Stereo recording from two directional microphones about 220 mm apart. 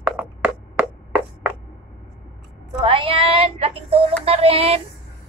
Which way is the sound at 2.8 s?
25° right (ahead or behind).